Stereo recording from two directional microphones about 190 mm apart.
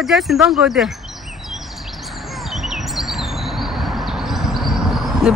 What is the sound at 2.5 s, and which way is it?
Chirp, centre (ahead or behind).